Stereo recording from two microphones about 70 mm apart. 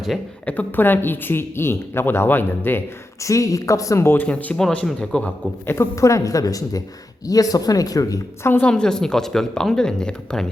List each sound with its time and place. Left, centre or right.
0.4 s a woman's voice: left
3.2 s a woman's voice: left
4.2 s speech: left
5.6 s a woman's voice: left
8.6 s speech: centre